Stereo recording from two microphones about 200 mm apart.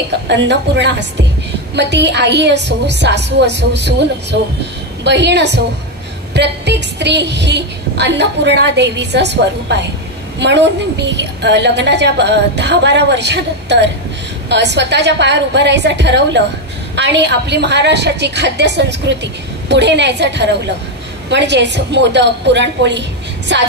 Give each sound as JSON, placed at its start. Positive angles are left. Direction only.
{"t": 0.3, "sound": "a woman's voice", "side_deg": -60}